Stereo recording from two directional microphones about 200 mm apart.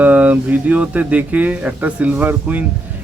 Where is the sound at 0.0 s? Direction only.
5° right (ahead or behind).